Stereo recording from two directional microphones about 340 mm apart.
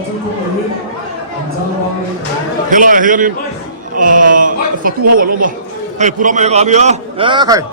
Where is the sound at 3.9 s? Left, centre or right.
Right.